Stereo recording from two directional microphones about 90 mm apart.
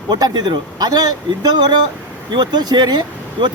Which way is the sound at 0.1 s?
55° right (ahead or behind).